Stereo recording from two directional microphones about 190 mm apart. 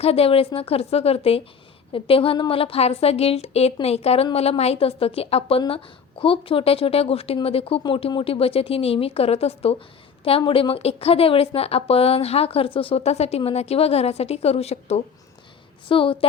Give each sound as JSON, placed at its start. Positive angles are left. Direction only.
{"t": 0.0, "sound": "a woman's voice", "side_deg": 30}